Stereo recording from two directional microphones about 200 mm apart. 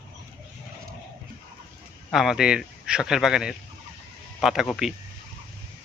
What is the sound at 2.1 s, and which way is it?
Speech, centre (ahead or behind).